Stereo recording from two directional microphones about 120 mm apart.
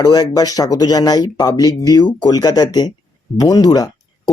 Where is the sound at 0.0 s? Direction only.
35° left (ahead or behind).